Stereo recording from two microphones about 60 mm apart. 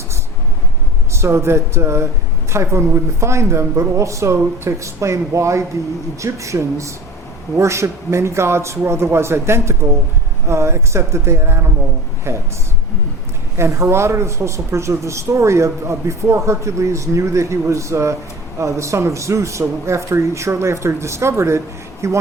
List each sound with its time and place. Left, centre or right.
1.1 s a woman's voice: right
13.6 s a woman's voice: right